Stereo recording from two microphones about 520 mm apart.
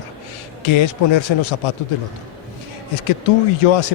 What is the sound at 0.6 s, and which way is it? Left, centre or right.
Speech, left.